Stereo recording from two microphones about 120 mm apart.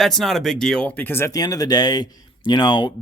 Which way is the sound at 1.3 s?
30° left (ahead or behind).